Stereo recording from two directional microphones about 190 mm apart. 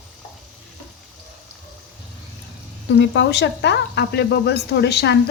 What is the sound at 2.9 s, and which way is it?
Speech, 70° left (ahead or behind).